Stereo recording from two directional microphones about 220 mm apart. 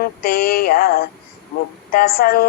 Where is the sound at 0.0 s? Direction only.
45° left (ahead or behind).